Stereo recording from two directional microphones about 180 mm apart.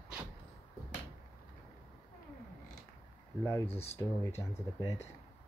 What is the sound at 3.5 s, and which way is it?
Speech, 15° left (ahead or behind).